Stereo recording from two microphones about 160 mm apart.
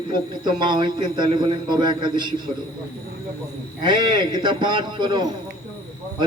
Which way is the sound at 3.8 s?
30° right (ahead or behind).